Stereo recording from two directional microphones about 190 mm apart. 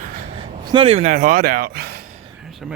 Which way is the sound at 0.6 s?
25° right (ahead or behind).